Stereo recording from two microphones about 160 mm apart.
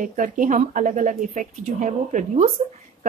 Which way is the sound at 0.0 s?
55° right (ahead or behind).